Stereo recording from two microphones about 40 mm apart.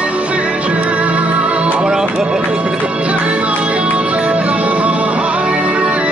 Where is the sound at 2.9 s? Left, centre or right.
Right.